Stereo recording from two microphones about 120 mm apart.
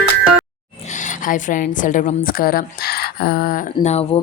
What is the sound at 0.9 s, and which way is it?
A woman's voice, 90° left.